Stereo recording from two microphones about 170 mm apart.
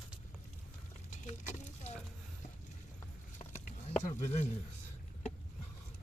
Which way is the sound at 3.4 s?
45° left (ahead or behind).